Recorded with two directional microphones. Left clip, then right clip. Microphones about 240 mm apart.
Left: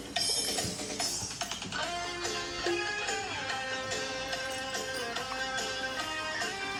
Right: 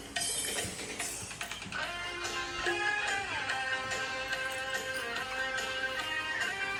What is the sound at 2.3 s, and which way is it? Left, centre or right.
Music, centre.